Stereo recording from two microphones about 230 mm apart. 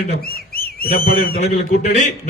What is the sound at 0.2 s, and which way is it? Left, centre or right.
Bird, left.